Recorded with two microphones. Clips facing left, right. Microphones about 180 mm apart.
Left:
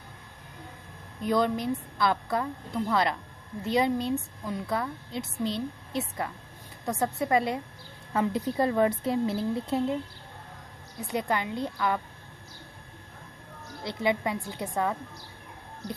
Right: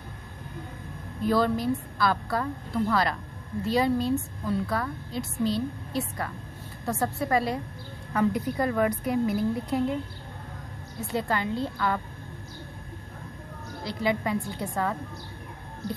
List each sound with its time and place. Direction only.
1.2 s a woman's voice: 20° left (ahead or behind)
11.0 s a woman's voice: 20° left (ahead or behind)
13.8 s a woman's voice: 20° left (ahead or behind)